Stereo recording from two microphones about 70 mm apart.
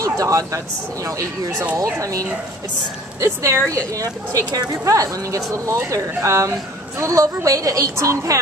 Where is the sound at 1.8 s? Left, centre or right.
Right.